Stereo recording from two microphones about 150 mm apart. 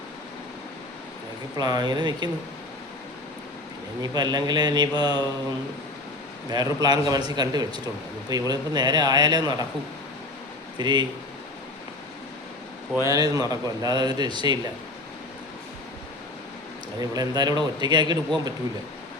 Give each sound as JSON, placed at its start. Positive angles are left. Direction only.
{"t": 1.5, "sound": "a man's voice", "side_deg": -25}
{"t": 4.0, "sound": "a man's voice", "side_deg": -25}
{"t": 6.5, "sound": "a man's voice", "side_deg": -25}
{"t": 10.8, "sound": "speech", "side_deg": -30}
{"t": 13.0, "sound": "a man's voice", "side_deg": -25}
{"t": 17.0, "sound": "a man's voice", "side_deg": -25}